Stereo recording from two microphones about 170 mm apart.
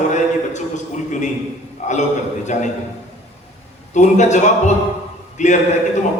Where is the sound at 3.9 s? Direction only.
45° left (ahead or behind).